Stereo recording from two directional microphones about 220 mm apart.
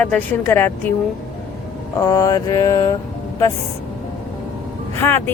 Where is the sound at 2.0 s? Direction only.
15° left (ahead or behind).